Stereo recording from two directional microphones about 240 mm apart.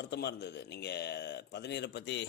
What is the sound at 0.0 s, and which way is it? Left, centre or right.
Speech, left.